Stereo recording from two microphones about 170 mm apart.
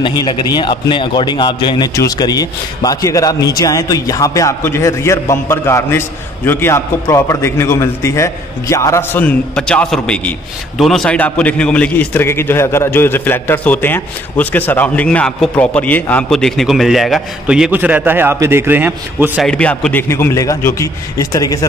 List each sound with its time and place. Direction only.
0.0 s a man's voice: 25° left (ahead or behind); by 19.4 s 10° right (ahead or behind)
19.4 s a man's voice: 5° left (ahead or behind)